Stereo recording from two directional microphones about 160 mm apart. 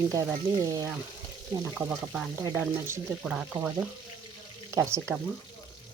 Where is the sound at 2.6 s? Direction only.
15° right (ahead or behind).